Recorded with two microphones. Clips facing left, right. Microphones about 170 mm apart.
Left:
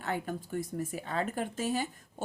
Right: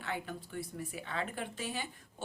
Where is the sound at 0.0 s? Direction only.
45° left (ahead or behind).